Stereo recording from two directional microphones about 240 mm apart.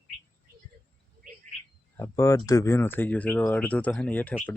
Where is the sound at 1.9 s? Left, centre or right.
Centre.